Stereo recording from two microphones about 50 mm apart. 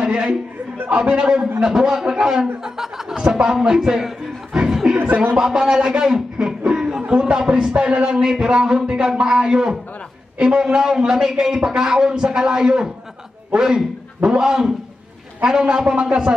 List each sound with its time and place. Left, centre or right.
0.0 s chuckle: right
0.8 s a man's voice: centre
4.8 s a sound: centre
5.4 s a man's voice: centre